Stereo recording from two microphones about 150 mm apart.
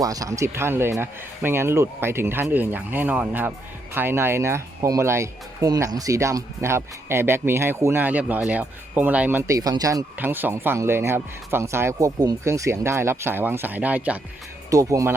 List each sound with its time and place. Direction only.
0.0 s speech: 25° right (ahead or behind)
9.5 s speech: 25° right (ahead or behind)
10.2 s speech: 15° right (ahead or behind)
14.7 s speech: 20° right (ahead or behind)